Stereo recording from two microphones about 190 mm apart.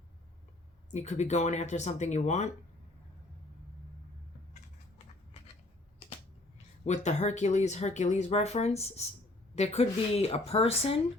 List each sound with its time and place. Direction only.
0.9 s speech: 35° left (ahead or behind)
6.8 s speech: 35° left (ahead or behind)